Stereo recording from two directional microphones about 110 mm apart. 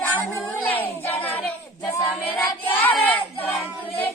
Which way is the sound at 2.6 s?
15° left (ahead or behind).